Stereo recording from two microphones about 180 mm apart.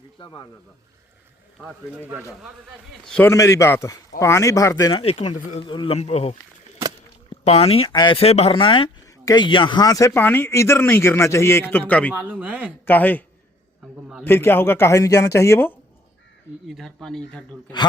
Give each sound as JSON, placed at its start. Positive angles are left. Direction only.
{"t": 0.2, "sound": "speech", "side_deg": 25}
{"t": 1.9, "sound": "speech", "side_deg": -10}
{"t": 3.1, "sound": "speech", "side_deg": 10}
{"t": 7.4, "sound": "speech", "side_deg": 35}
{"t": 12.1, "sound": "speech", "side_deg": -10}
{"t": 12.8, "sound": "speech", "side_deg": 10}
{"t": 13.8, "sound": "a man's voice", "side_deg": -5}
{"t": 14.3, "sound": "speech", "side_deg": 15}
{"t": 16.6, "sound": "speech", "side_deg": 0}